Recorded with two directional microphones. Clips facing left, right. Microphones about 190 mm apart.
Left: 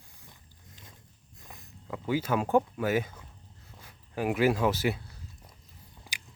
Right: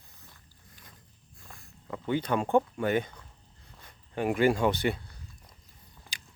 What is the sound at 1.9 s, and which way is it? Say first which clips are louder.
Speech: even; 5° left (ahead or behind).